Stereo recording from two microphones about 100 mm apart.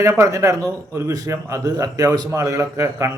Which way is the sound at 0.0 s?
25° right (ahead or behind).